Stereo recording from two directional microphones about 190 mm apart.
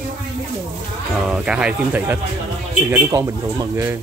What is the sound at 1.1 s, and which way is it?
Speech, 5° right (ahead or behind).